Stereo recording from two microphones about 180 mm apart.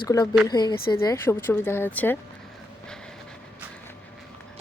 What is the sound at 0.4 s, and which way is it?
Speech, 25° left (ahead or behind).